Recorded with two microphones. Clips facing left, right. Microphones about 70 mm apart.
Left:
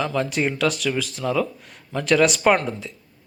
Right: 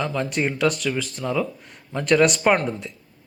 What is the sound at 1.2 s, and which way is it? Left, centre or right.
A man's voice, centre.